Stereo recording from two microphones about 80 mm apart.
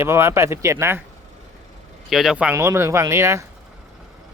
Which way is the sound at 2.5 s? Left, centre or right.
Right.